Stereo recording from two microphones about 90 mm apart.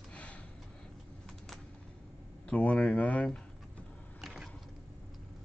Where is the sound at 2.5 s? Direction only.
15° left (ahead or behind).